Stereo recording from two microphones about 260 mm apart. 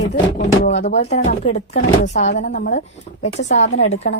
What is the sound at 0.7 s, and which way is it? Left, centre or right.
A woman's voice, left.